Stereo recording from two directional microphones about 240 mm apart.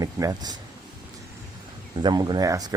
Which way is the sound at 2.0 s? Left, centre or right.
Centre.